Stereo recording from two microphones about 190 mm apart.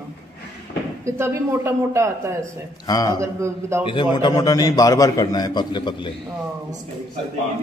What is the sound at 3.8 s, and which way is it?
A man's voice, 25° left (ahead or behind).